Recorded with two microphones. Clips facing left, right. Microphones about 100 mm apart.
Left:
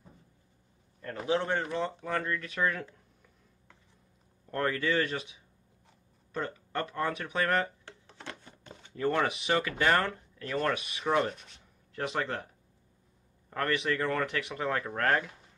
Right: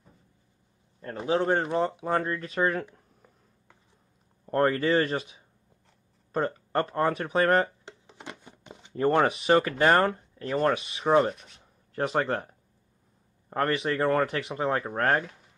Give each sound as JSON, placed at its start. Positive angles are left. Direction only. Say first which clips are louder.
{"t": 1.0, "sound": "speech", "louder": "right 4 dB", "side_deg": -30}
{"t": 4.5, "sound": "speech", "louder": "right 6 dB", "side_deg": -35}
{"t": 7.8, "sound": "a sound", "louder": "right 2 dB", "side_deg": -15}
{"t": 8.9, "sound": "speech", "louder": "right 6 dB", "side_deg": -35}
{"t": 11.3, "sound": "rub", "louder": "right 1 dB", "side_deg": 0}
{"t": 11.6, "sound": "a sound", "louder": "right 6 dB", "side_deg": -35}
{"t": 13.5, "sound": "speech", "louder": "right 4 dB", "side_deg": -35}